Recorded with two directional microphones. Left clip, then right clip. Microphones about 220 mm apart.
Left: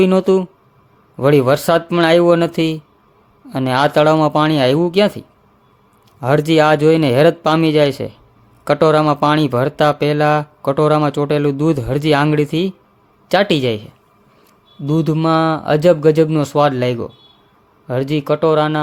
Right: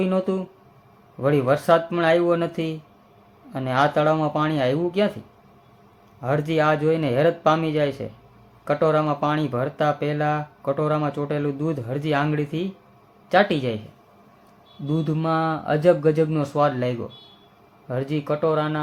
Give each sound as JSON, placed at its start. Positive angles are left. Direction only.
{"t": 0.0, "sound": "speech", "side_deg": 50}
{"t": 6.1, "sound": "speech", "side_deg": 50}
{"t": 14.8, "sound": "speech", "side_deg": 50}